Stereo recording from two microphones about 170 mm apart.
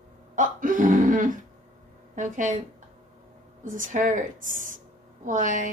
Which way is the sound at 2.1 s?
50° right (ahead or behind).